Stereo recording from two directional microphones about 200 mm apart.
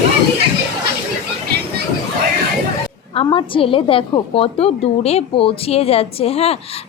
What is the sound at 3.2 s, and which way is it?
A woman's voice, 25° left (ahead or behind).